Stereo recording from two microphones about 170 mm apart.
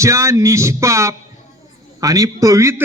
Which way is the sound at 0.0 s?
15° right (ahead or behind).